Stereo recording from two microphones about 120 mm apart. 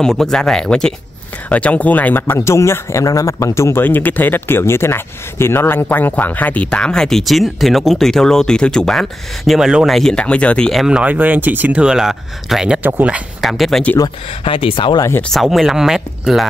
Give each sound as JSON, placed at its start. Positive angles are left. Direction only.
{"t": 0.0, "sound": "speech", "side_deg": 5}
{"t": 13.4, "sound": "speech", "side_deg": 0}
{"t": 14.4, "sound": "speech", "side_deg": 50}
{"t": 15.0, "sound": "speech", "side_deg": 20}
{"t": 15.2, "sound": "speech", "side_deg": 0}